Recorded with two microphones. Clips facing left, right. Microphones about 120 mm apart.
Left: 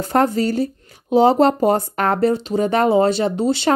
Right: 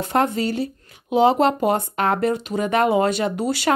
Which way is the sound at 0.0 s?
40° left (ahead or behind).